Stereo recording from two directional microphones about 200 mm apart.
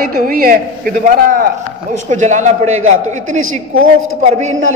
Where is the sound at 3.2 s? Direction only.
90° right.